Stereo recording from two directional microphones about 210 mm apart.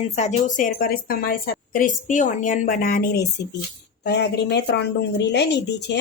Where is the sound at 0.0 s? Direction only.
30° left (ahead or behind).